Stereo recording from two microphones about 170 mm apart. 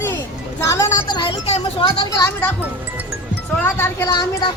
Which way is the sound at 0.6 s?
20° left (ahead or behind).